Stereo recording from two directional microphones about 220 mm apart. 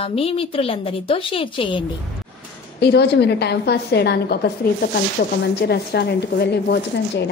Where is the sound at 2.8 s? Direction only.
50° left (ahead or behind).